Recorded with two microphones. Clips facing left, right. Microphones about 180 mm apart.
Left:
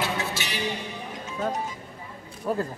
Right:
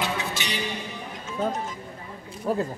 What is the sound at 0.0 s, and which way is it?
Music, 15° right (ahead or behind).